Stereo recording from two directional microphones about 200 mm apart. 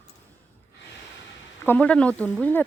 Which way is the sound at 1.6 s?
10° left (ahead or behind).